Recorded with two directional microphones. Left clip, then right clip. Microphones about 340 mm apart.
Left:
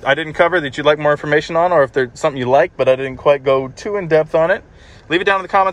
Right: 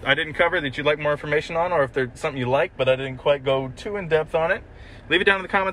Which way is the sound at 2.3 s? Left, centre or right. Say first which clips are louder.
Left 8 dB; left.